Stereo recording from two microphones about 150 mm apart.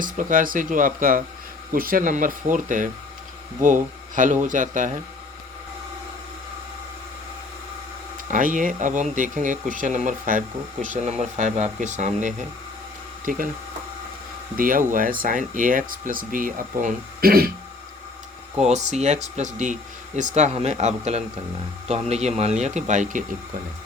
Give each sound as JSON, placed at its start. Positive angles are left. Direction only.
{"t": 0.0, "sound": "speech", "side_deg": -60}
{"t": 8.3, "sound": "speech", "side_deg": -60}
{"t": 13.2, "sound": "speech", "side_deg": -65}
{"t": 14.5, "sound": "speech", "side_deg": -70}
{"t": 18.6, "sound": "speech", "side_deg": -50}